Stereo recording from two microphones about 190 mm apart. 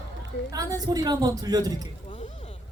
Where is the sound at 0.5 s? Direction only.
20° right (ahead or behind).